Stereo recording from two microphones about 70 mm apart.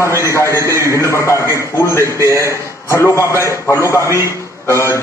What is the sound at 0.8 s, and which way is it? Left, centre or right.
A man's voice, left.